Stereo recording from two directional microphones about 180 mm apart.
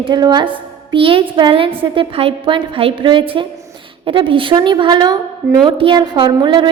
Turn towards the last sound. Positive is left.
turn(degrees=-25)  # may be behind; listen again after turning